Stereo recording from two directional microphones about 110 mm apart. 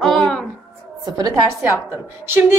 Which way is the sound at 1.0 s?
35° right (ahead or behind).